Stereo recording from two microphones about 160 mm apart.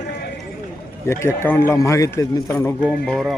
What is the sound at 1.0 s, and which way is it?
A man's voice, 15° left (ahead or behind).